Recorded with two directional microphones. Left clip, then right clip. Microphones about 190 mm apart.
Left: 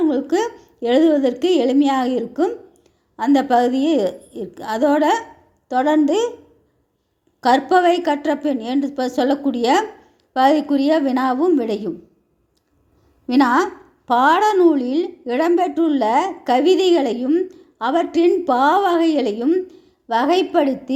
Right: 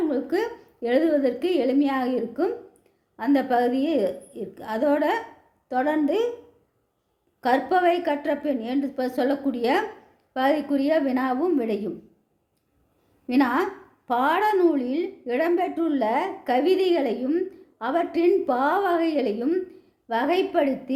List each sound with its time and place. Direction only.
0.0 s a woman's voice: 30° left (ahead or behind)
7.4 s a woman's voice: 30° left (ahead or behind)
13.2 s a woman's voice: 30° left (ahead or behind)